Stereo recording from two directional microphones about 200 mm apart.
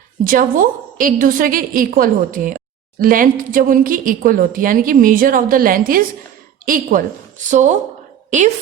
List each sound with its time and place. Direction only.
0.3 s a woman's voice: 40° right (ahead or behind)